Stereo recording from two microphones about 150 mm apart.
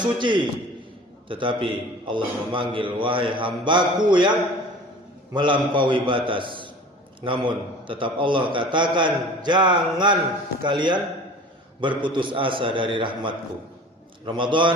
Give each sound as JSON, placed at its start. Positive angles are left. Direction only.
{"t": 0.0, "sound": "a man's voice", "side_deg": -30}